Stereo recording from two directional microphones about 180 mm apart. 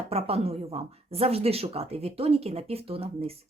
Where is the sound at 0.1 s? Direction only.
35° right (ahead or behind).